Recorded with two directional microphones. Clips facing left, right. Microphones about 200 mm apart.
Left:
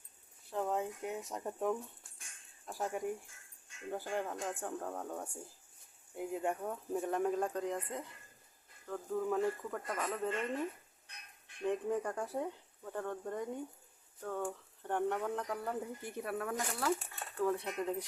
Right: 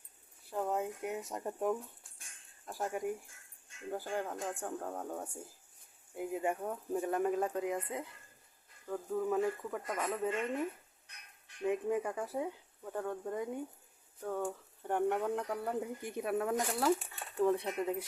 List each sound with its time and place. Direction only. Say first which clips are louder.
0.5 s a sound: right 1 dB; 5° right (ahead or behind)
1.3 s speech: right 1 dB; 5° right (ahead or behind)
9.0 s speech: right 1 dB; 5° right (ahead or behind)
11.6 s speech: right 2 dB; 5° right (ahead or behind)